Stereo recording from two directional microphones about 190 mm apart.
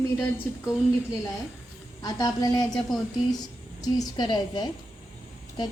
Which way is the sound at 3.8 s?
25° left (ahead or behind).